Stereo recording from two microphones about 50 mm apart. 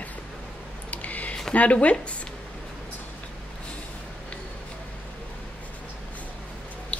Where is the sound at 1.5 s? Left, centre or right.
Left.